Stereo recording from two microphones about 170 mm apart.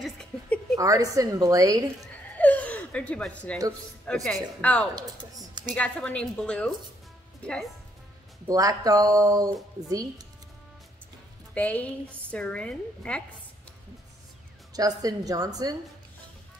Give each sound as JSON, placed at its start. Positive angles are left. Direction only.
{"t": 0.0, "sound": "a sound", "side_deg": 5}
{"t": 0.7, "sound": "a woman's voice", "side_deg": -20}
{"t": 2.3, "sound": "gasp", "side_deg": 10}
{"t": 4.0, "sound": "a woman's voice", "side_deg": 5}
{"t": 4.9, "sound": "typing", "side_deg": -25}
{"t": 5.8, "sound": "a woman's voice", "side_deg": 5}
{"t": 8.5, "sound": "a woman's voice", "side_deg": -20}
{"t": 11.5, "sound": "a woman's voice", "side_deg": 10}
{"t": 14.7, "sound": "a woman's voice", "side_deg": -20}